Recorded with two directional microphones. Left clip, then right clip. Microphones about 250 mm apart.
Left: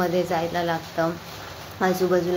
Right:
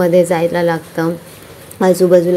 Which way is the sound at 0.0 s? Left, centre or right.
Right.